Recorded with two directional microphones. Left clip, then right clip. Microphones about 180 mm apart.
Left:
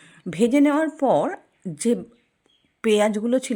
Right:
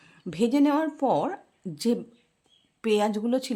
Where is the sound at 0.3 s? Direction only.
20° left (ahead or behind).